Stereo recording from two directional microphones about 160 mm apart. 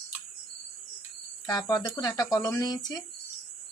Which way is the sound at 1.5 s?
25° left (ahead or behind).